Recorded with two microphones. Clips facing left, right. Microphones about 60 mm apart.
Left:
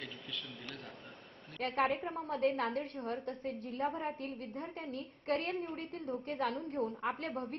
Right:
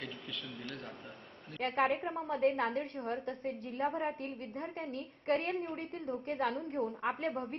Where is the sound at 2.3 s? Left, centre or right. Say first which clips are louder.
Right 2 dB; right.